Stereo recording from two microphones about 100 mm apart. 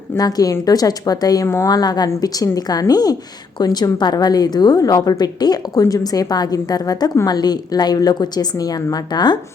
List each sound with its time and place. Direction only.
0.2 s a woman's voice: 40° left (ahead or behind)
1.5 s a woman's voice: 25° left (ahead or behind)
1.7 s a woman's voice: 40° left (ahead or behind)